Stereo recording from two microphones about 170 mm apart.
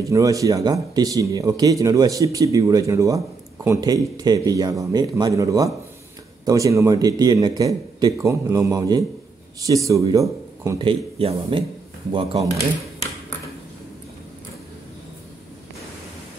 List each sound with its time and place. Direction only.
0.1 s speech: 20° right (ahead or behind)
10.8 s speech: 30° right (ahead or behind)